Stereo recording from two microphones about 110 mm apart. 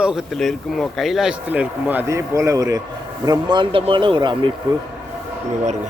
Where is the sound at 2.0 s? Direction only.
30° right (ahead or behind); by 4.5 s 45° right (ahead or behind).